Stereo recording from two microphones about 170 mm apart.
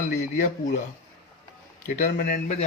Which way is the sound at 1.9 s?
50° left (ahead or behind).